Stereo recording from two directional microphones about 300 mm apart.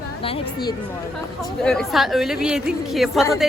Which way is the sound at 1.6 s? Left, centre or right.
Centre.